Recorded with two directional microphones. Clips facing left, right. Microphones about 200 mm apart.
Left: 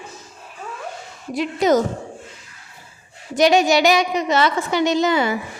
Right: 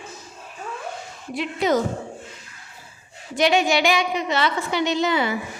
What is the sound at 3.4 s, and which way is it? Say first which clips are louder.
A woman's voice: left 4 dB; 40° left (ahead or behind).